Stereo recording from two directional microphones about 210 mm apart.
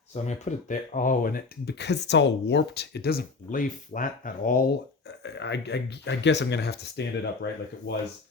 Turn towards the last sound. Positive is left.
turn(degrees=55)  # may be behind; listen again after turning